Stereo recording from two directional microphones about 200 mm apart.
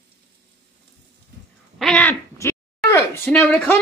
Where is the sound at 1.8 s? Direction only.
5° left (ahead or behind).